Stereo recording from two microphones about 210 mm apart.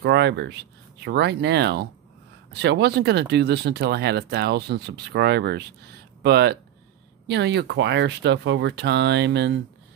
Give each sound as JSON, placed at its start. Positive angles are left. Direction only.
{"t": 0.0, "sound": "speech", "side_deg": -55}